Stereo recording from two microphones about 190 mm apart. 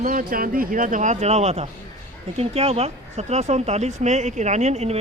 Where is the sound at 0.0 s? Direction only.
45° right (ahead or behind).